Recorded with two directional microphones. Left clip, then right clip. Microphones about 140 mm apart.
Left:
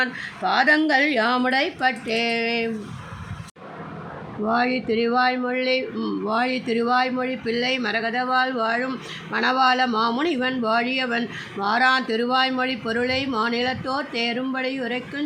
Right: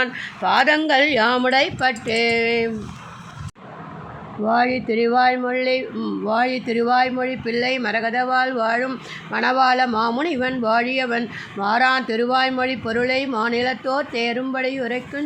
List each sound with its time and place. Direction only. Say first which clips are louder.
0.0 s speech: right 2 dB; 40° right (ahead or behind)
4.4 s speech: right 3 dB; 35° right (ahead or behind)